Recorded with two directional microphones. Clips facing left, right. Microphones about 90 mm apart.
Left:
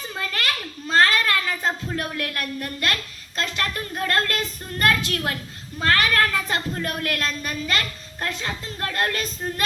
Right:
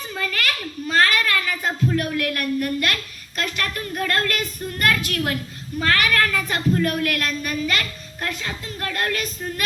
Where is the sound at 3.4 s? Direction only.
25° left (ahead or behind).